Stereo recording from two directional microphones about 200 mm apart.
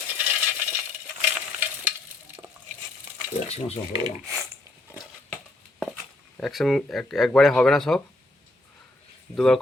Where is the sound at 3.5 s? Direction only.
30° left (ahead or behind).